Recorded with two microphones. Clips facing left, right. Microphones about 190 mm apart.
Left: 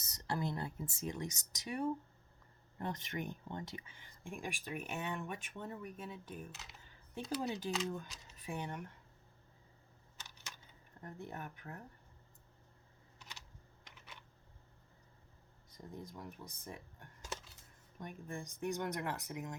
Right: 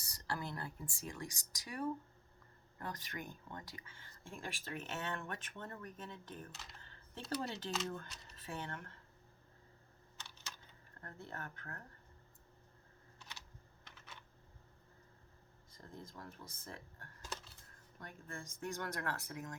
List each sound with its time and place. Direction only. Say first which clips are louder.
0.0 s speech: left 4 dB; 20° left (ahead or behind); by 8.4 s centre (ahead or behind)
8.4 s speech: left 3 dB; 15° left (ahead or behind)
11.0 s speech: left 3 dB; 15° left (ahead or behind)
13.8 s typing: even; 15° left (ahead or behind)
15.8 s speech: left 3 dB; 15° left (ahead or behind)